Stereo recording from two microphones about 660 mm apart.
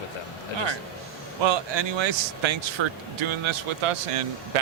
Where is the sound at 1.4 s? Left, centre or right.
Right.